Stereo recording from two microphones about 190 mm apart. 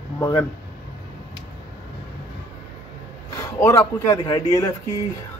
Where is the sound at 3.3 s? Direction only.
15° left (ahead or behind).